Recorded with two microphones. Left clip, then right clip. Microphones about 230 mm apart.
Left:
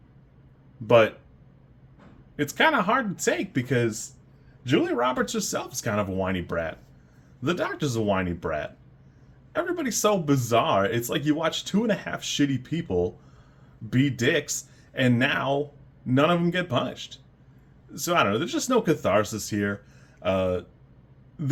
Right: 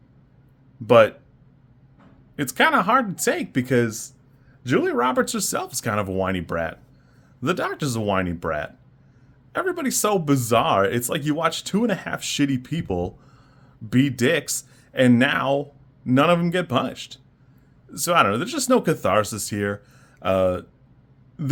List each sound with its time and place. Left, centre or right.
0.9 s speech: right
2.3 s speech: right